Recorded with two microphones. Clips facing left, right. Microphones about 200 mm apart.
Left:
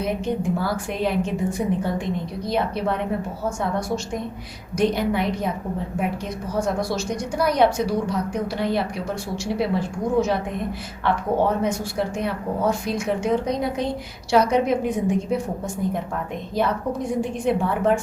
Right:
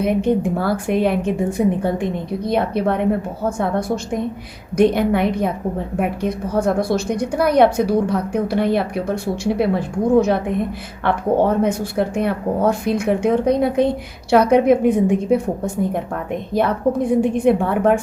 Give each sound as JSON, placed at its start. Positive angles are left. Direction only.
{"t": 0.0, "sound": "a woman's voice", "side_deg": -55}